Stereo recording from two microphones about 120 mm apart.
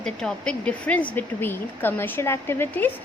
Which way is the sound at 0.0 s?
5° left (ahead or behind).